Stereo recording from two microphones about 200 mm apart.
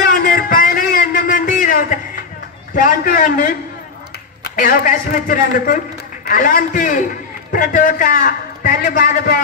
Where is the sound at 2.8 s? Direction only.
40° left (ahead or behind).